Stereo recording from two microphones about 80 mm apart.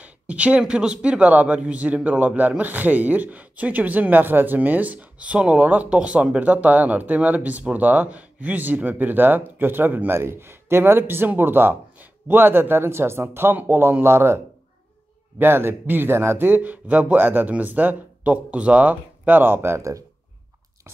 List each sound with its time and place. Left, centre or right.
0.0 s a man's voice: centre; by 20.0 s right